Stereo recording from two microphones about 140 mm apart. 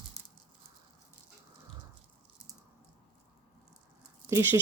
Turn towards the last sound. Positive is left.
turn(degrees=-15)  # may be behind; listen again after turning